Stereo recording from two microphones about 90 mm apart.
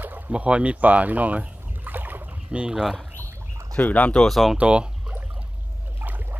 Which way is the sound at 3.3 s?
30° right (ahead or behind).